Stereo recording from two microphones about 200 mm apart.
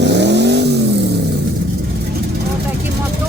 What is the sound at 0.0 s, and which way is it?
Vehicle, 60° right (ahead or behind).